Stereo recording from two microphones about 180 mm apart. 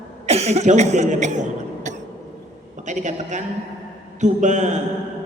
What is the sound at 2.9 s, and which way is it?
A man's voice, 40° right (ahead or behind).